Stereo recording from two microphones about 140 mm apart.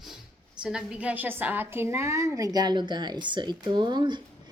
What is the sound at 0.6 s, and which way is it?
A woman's voice, 5° right (ahead or behind).